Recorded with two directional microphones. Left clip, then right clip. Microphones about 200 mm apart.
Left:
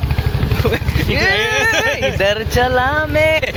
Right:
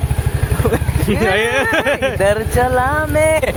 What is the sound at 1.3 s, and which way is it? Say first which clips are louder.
Speech: right 1 dB; 45° right (ahead or behind).